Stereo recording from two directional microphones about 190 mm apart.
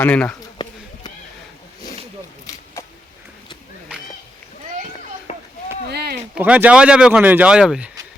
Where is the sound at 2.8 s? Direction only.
15° left (ahead or behind).